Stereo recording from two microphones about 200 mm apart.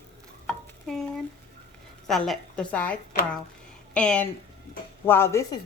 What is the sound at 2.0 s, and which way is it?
Speech, centre (ahead or behind).